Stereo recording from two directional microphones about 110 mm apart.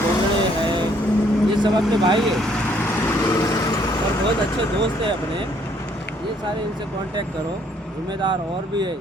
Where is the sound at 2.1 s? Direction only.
5° left (ahead or behind); by 3.9 s 35° left (ahead or behind).